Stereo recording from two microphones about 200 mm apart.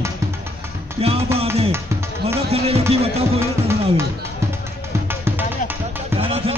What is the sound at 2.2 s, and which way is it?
Speech, 30° right (ahead or behind).